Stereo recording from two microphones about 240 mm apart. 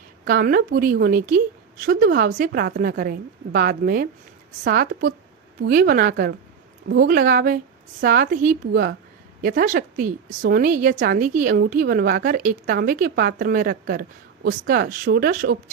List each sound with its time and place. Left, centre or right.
0.3 s a woman's voice: right